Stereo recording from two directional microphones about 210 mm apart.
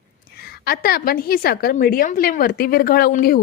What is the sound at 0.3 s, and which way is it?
Speech, 45° left (ahead or behind).